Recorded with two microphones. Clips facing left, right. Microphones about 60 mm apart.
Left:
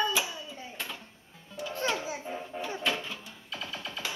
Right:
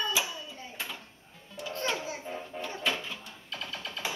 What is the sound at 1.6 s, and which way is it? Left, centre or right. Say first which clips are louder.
Music: left 2 dB; centre.